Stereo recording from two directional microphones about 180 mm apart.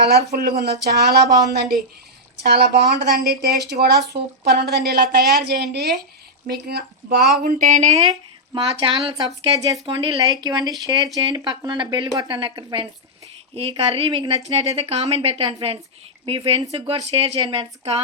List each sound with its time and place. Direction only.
0.3 s a woman's voice: 55° right (ahead or behind)
7.4 s a woman's voice: 45° right (ahead or behind)